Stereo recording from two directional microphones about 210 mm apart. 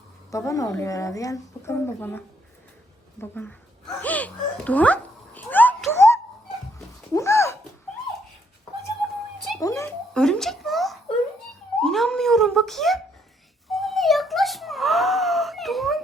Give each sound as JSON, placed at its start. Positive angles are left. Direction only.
{"t": 0.3, "sound": "speech", "side_deg": 15}
{"t": 4.0, "sound": "a sound", "side_deg": 5}
{"t": 9.6, "sound": "dog", "side_deg": 15}
{"t": 10.2, "sound": "a sound", "side_deg": 5}
{"t": 11.8, "sound": "speech", "side_deg": 0}
{"t": 13.7, "sound": "wail", "side_deg": 0}